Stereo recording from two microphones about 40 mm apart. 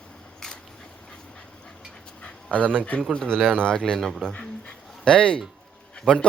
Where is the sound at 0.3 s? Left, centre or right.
Centre.